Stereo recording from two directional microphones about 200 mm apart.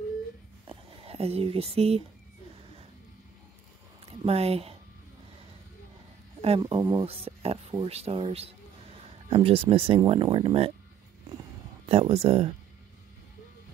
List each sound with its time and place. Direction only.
0.7 s a sound: 30° right (ahead or behind)
4.2 s speech: 30° right (ahead or behind)
6.6 s speech: 20° right (ahead or behind)
11.8 s speech: 30° right (ahead or behind)